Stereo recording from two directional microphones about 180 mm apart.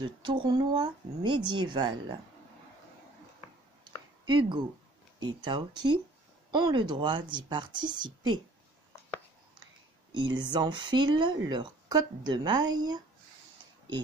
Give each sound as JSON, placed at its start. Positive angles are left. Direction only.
{"t": 0.2, "sound": "speech", "side_deg": -25}
{"t": 3.8, "sound": "a sound", "side_deg": -25}
{"t": 5.2, "sound": "speech", "side_deg": -25}
{"t": 10.1, "sound": "speech", "side_deg": -25}